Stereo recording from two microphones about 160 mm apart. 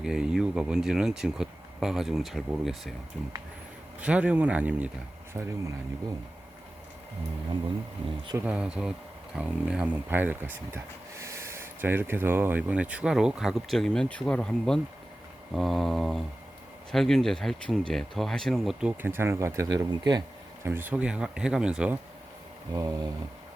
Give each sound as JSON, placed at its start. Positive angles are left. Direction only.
{"t": 0.0, "sound": "speech", "side_deg": -5}
{"t": 4.0, "sound": "speech", "side_deg": -5}
{"t": 8.4, "sound": "speech", "side_deg": -5}
{"t": 20.7, "sound": "speech", "side_deg": -10}
{"t": 22.7, "sound": "a sound", "side_deg": -25}